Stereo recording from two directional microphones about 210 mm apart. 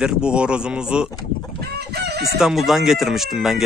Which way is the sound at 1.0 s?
15° left (ahead or behind).